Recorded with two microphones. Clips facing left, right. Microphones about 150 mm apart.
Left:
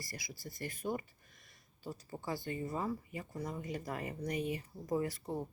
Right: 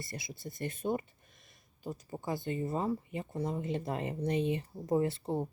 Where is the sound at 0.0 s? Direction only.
25° right (ahead or behind).